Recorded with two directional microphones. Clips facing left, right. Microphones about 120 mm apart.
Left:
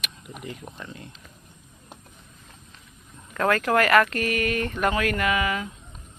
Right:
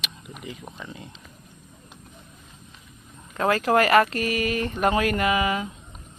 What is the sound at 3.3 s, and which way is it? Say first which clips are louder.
Speech: right 1 dB; 25° right (ahead or behind).